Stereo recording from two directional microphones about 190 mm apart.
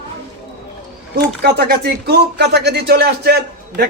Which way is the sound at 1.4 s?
60° right (ahead or behind).